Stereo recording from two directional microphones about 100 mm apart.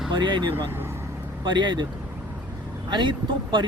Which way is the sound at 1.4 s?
50° right (ahead or behind).